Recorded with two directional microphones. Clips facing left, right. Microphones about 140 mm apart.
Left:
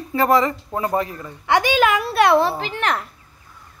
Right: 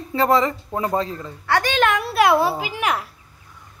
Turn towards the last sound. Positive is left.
turn(degrees=-10)  # may be behind; listen again after turning